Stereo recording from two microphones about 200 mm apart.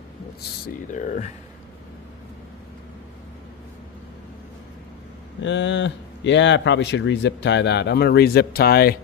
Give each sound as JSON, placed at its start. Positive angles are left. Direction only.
{"t": 0.9, "sound": "speech", "side_deg": 40}
{"t": 5.4, "sound": "speech", "side_deg": 65}